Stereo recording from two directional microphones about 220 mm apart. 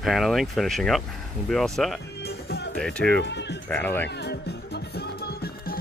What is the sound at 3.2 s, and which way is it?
Speech, 50° left (ahead or behind).